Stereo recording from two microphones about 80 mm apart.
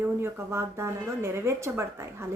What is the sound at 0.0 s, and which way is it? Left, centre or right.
Speech, right.